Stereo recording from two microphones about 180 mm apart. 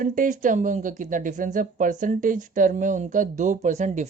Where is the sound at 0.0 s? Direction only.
45° right (ahead or behind).